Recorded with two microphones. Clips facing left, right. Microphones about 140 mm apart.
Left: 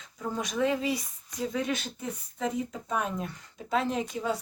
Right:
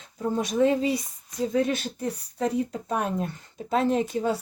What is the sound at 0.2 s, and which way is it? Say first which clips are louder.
Speech: right 6 dB; 40° right (ahead or behind).